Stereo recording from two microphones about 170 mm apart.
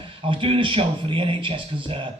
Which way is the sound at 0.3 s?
30° right (ahead or behind).